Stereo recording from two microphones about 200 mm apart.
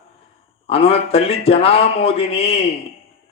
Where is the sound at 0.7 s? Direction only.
30° left (ahead or behind).